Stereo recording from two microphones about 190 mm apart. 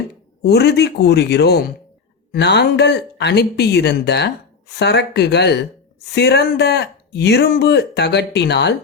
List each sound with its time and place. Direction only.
0.4 s speech: 60° left (ahead or behind)